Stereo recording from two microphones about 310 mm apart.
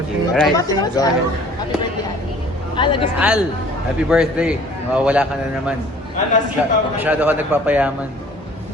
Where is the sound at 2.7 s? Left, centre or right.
Centre.